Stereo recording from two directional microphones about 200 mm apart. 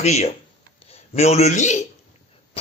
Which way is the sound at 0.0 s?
35° left (ahead or behind).